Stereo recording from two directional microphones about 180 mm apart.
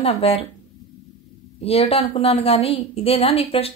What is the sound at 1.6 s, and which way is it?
A woman's voice, 35° left (ahead or behind).